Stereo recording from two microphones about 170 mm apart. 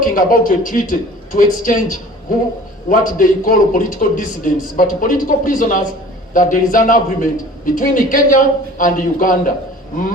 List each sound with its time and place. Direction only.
0.0 s a man's voice: 55° left (ahead or behind)